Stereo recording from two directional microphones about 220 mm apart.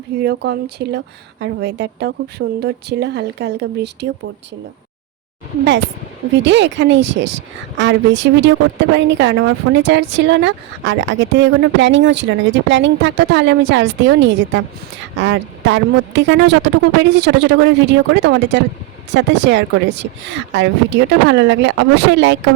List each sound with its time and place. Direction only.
0.2 s speech: 45° right (ahead or behind)
6.4 s a woman's voice: 55° right (ahead or behind)